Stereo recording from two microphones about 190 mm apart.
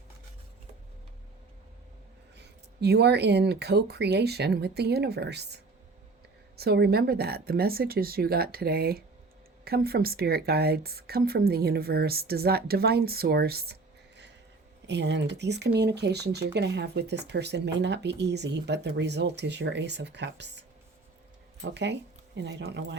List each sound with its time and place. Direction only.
2.4 s a woman's voice: 60° right (ahead or behind)
6.6 s a woman's voice: 55° right (ahead or behind)
14.8 s a woman's voice: 65° right (ahead or behind)